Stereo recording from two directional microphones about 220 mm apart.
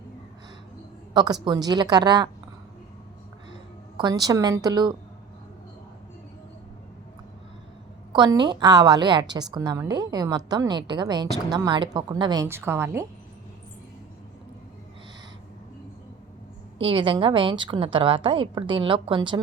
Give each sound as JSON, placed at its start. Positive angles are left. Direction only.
{"t": 1.1, "sound": "a woman's voice", "side_deg": -20}
{"t": 3.9, "sound": "a woman's voice", "side_deg": -20}
{"t": 8.1, "sound": "a woman's voice", "side_deg": -20}
{"t": 16.7, "sound": "a woman's voice", "side_deg": -25}